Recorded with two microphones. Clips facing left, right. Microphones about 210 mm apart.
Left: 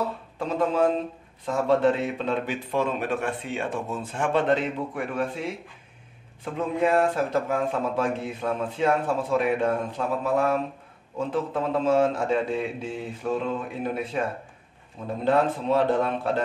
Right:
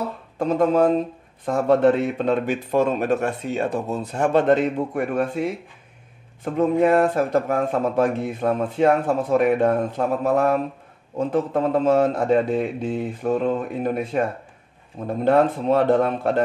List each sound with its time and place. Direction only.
0.4 s speech: 45° right (ahead or behind)
6.4 s speech: 45° right (ahead or behind)
15.2 s speech: 50° right (ahead or behind)